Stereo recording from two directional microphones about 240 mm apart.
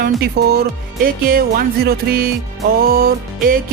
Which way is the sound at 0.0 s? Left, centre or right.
Right.